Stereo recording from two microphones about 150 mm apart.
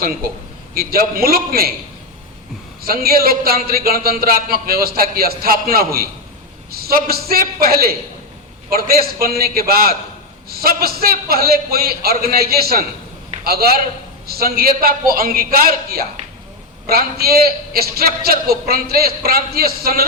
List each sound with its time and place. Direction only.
0.7 s a man's voice: 80° right
2.8 s a man's voice: 85° right